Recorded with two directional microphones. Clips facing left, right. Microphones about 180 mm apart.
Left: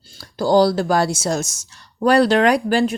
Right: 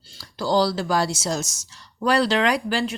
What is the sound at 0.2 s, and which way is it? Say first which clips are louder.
A woman's voice: left 6 dB; 50° left (ahead or behind).